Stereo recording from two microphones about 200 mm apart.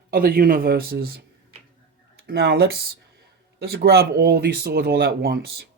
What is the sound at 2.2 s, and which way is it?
Speech, 50° right (ahead or behind).